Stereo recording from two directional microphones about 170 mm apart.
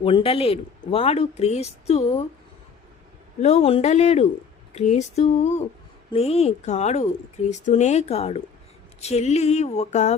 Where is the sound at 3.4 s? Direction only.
40° left (ahead or behind).